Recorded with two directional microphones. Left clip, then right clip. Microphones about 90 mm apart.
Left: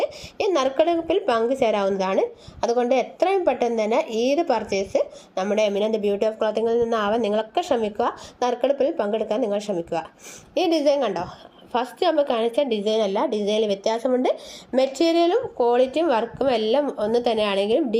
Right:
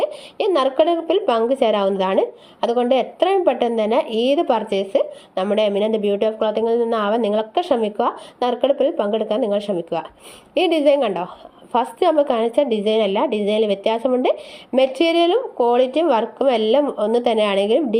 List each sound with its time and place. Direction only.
0.0 s a woman's voice: 35° right (ahead or behind)